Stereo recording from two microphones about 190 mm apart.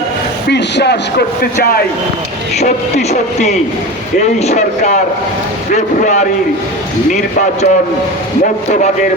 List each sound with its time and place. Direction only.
0.5 s speech: 60° left (ahead or behind)
2.6 s speech: 35° left (ahead or behind)